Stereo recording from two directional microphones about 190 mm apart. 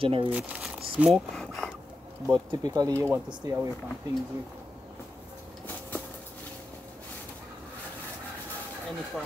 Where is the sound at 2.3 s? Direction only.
20° right (ahead or behind).